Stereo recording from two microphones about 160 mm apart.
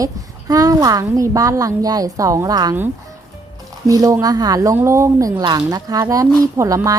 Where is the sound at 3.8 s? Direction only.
20° right (ahead or behind).